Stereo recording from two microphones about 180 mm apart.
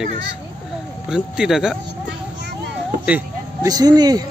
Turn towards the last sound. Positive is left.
turn(degrees=-20)  # may be behind; listen again after turning